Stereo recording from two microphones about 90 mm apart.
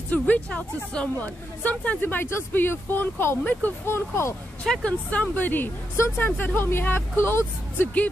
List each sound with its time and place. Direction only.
0.1 s a woman's voice: 15° left (ahead or behind); by 4.4 s 30° left (ahead or behind)
4.6 s a woman's voice: 15° left (ahead or behind)